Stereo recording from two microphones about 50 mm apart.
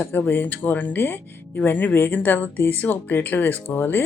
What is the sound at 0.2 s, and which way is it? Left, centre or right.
Speech, left.